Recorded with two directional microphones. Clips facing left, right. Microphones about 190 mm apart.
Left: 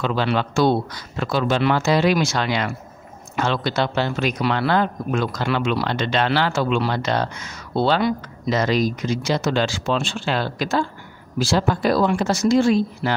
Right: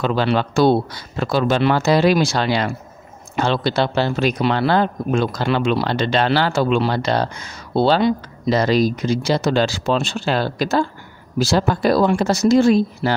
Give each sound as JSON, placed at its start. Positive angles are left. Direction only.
{"t": 0.0, "sound": "speech", "side_deg": -40}